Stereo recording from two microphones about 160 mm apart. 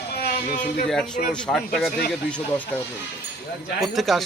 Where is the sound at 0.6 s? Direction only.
5° left (ahead or behind).